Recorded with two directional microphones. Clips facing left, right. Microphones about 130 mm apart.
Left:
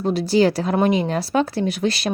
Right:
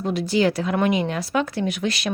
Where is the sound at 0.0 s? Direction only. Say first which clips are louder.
Left 3 dB; 35° left (ahead or behind).